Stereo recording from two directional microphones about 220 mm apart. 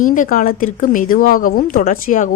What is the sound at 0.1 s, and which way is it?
Speech, 40° left (ahead or behind).